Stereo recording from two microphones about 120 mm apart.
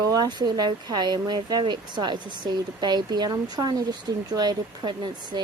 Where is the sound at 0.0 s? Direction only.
35° right (ahead or behind).